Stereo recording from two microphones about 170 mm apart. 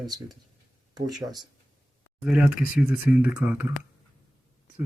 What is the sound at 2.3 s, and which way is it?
Speech, 5° right (ahead or behind).